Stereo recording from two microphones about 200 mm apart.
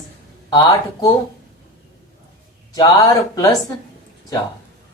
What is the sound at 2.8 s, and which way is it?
Speech, 20° left (ahead or behind).